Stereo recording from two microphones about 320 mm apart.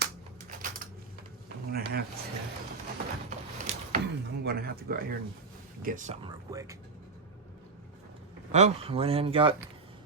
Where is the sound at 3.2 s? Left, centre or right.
Right.